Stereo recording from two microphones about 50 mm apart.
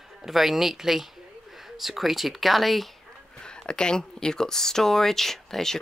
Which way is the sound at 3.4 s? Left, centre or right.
Centre.